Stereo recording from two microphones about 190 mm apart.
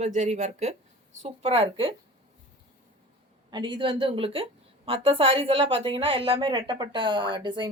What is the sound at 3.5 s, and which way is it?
Speech, 25° right (ahead or behind).